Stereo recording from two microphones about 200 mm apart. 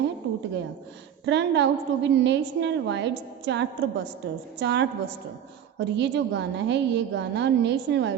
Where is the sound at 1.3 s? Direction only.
60° right (ahead or behind).